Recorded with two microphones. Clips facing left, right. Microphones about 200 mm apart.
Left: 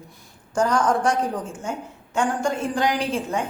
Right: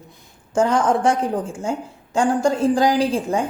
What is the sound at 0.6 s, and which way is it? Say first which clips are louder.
A woman's voice: right 3 dB; 25° right (ahead or behind).